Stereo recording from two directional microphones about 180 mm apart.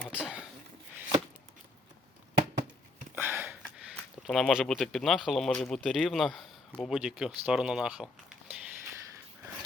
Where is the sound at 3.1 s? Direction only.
10° right (ahead or behind).